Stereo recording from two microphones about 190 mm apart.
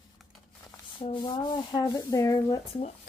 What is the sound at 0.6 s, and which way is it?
Sanding, 25° left (ahead or behind).